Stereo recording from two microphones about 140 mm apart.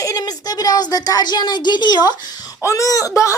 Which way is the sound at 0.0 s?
25° left (ahead or behind).